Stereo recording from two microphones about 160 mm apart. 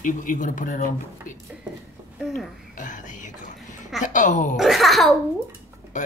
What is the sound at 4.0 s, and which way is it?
Speech, 50° left (ahead or behind).